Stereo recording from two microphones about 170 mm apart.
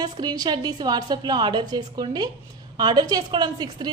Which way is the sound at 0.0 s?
25° right (ahead or behind).